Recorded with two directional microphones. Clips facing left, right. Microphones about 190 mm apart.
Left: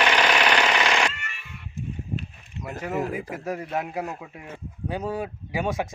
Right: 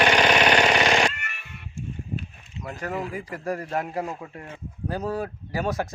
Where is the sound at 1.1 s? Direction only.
65° right (ahead or behind).